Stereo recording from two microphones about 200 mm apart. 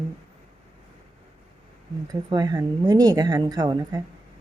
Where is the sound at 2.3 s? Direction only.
20° right (ahead or behind).